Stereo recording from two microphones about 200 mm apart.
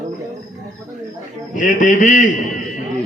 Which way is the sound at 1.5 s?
40° left (ahead or behind).